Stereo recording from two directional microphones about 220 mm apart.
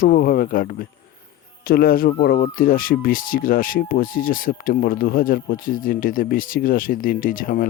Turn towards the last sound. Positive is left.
turn(degrees=40)  # may be behind; listen again after turning